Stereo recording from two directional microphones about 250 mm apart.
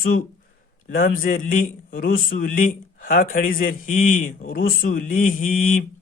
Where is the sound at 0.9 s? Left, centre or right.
Left.